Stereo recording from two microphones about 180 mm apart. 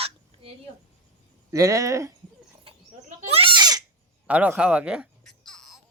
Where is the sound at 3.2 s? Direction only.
30° right (ahead or behind).